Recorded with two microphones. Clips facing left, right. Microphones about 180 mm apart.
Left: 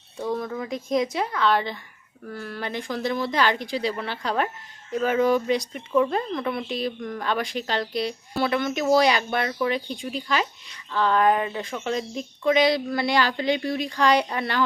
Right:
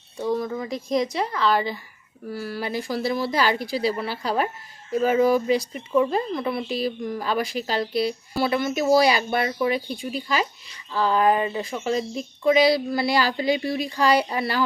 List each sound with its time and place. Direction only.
0.2 s speech: centre (ahead or behind)